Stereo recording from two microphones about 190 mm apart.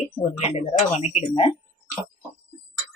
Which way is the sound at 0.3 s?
35° left (ahead or behind).